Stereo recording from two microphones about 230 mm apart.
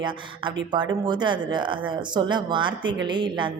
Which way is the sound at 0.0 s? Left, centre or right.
Right.